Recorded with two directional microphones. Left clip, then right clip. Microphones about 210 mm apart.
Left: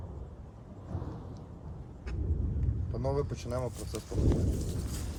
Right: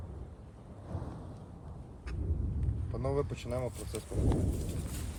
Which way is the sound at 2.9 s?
15° right (ahead or behind).